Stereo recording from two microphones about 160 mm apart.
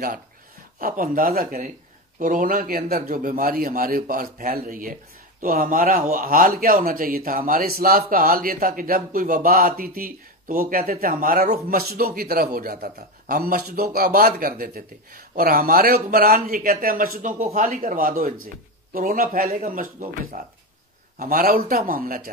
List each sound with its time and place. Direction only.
0.7 s speech: 60° right (ahead or behind)
11.7 s a man's voice: 70° right (ahead or behind)